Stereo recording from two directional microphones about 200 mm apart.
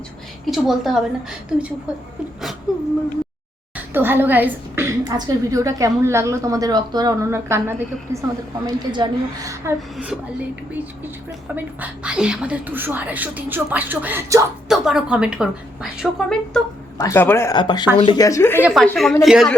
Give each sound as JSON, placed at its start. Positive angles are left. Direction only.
{"t": 0.4, "sound": "a woman's voice", "side_deg": 0}
{"t": 3.9, "sound": "a woman's voice", "side_deg": -10}
{"t": 14.7, "sound": "a woman's voice", "side_deg": 0}
{"t": 18.6, "sound": "a woman's voice", "side_deg": 0}